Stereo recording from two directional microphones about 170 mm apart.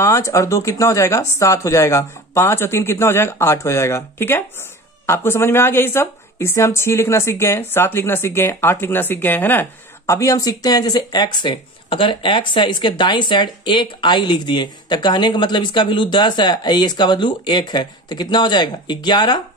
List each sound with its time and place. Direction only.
0.0 s a woman's voice: 15° left (ahead or behind)